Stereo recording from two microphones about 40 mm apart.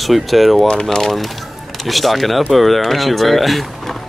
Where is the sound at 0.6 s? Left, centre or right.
Centre.